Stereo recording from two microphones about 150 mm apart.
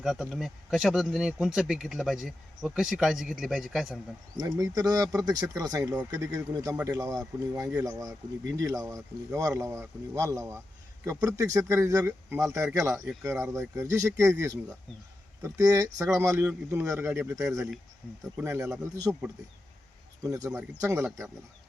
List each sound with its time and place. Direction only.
0.0 s speech: 5° right (ahead or behind)
4.4 s speech: 25° right (ahead or behind)
20.2 s speech: 20° right (ahead or behind)